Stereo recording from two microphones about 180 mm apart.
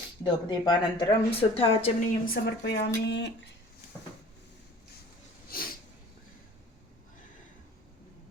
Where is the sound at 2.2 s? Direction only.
60° left (ahead or behind).